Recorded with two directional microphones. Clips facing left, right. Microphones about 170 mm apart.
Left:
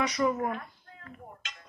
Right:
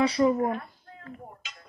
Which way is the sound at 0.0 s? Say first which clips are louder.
Right 5 dB; 30° right (ahead or behind).